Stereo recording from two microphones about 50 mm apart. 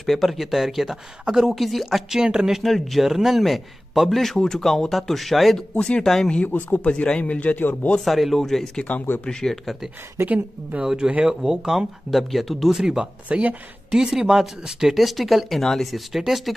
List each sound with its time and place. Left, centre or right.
0.0 s a man's voice: centre
2.6 s a man's voice: centre
5.8 s speech: centre
6.4 s speech: left
8.0 s a man's voice: centre
10.2 s a woman's voice: right
10.8 s speech: centre
12.1 s a man's voice: centre
12.7 s speech: centre
13.3 s speech: right
13.8 s a man's voice: centre